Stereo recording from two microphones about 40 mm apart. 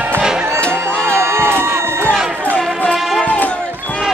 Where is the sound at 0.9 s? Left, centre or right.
Left.